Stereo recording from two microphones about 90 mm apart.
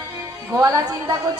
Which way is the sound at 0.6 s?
40° right (ahead or behind).